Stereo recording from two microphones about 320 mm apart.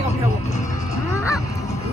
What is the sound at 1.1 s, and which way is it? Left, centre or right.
Honk, centre.